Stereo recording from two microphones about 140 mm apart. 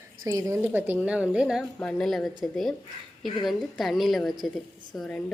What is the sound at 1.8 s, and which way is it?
Speech, 5° left (ahead or behind).